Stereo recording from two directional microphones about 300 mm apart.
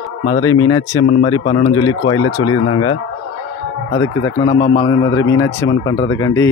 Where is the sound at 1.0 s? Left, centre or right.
Left.